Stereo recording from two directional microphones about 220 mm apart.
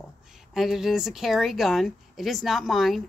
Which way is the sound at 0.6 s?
Centre (ahead or behind).